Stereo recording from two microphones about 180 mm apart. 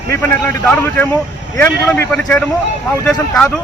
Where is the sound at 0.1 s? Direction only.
10° left (ahead or behind).